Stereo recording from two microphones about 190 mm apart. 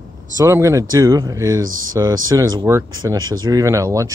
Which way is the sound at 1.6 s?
90° right.